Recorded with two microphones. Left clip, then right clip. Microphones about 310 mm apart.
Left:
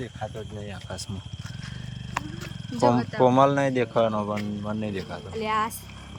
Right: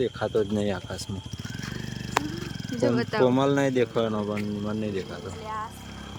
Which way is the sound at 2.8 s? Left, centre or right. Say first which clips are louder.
Left 2 dB; centre.